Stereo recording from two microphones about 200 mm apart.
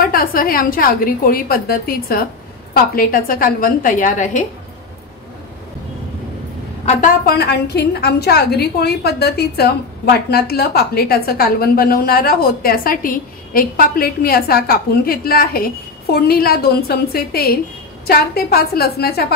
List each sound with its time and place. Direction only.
0.0 s a woman's voice: 45° left (ahead or behind)
6.9 s a woman's voice: 40° left (ahead or behind)